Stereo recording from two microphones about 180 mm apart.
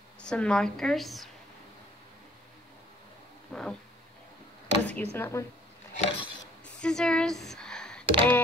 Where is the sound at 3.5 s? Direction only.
5° left (ahead or behind).